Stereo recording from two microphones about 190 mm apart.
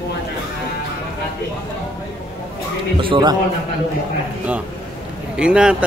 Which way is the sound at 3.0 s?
25° right (ahead or behind).